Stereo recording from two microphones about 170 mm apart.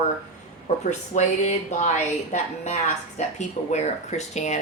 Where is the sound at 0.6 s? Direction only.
45° left (ahead or behind).